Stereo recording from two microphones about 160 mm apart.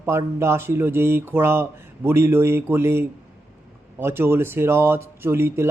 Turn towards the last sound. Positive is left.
turn(degrees=-15)  # may be behind; listen again after turning